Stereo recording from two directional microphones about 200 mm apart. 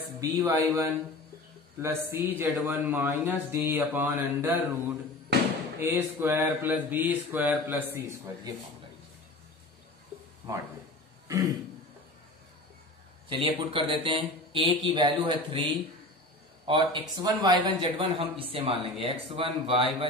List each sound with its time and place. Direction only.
0.2 s speech: 15° right (ahead or behind)
5.3 s slam: 55° right (ahead or behind)
5.8 s speech: 10° right (ahead or behind)
11.2 s throat clearing: 15° right (ahead or behind)
13.3 s a man's voice: 25° right (ahead or behind)
16.6 s a man's voice: 25° right (ahead or behind)